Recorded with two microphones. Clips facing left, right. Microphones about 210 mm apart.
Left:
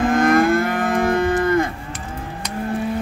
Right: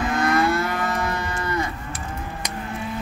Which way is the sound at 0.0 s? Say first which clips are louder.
Left 6 dB; 50° left (ahead or behind).